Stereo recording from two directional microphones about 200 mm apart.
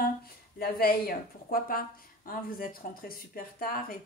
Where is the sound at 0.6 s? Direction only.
50° left (ahead or behind).